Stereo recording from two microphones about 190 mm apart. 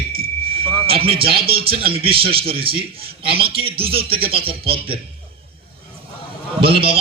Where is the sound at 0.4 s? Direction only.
30° right (ahead or behind).